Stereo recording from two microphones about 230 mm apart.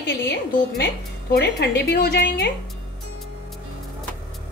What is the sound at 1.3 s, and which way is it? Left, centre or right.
A woman's voice, left.